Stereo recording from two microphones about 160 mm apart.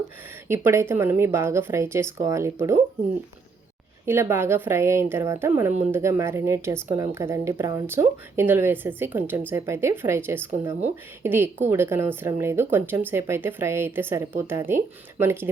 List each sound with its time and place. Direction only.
0.4 s speech: 15° right (ahead or behind)
4.0 s speech: 15° right (ahead or behind)